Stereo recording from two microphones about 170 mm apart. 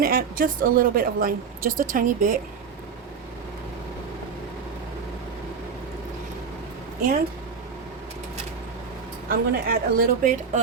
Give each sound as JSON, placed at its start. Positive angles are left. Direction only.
{"t": 0.0, "sound": "a woman's voice", "side_deg": -60}
{"t": 9.3, "sound": "a woman's voice", "side_deg": -60}